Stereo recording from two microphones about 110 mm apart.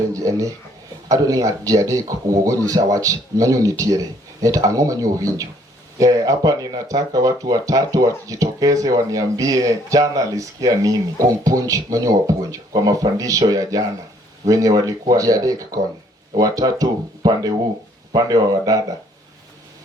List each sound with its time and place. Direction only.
0.1 s speech: 30° right (ahead or behind)